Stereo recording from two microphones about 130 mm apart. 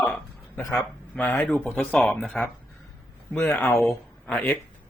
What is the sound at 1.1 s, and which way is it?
Speech, 10° left (ahead or behind).